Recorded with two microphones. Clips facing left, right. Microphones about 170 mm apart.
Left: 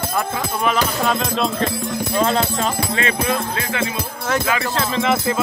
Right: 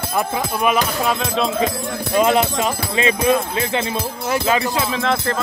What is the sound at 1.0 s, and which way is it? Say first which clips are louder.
Speech: even; 5° right (ahead or behind).